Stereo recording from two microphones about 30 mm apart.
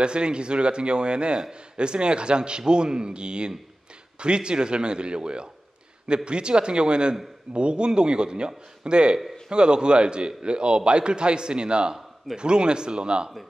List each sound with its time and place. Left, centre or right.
0.0 s a man's voice: right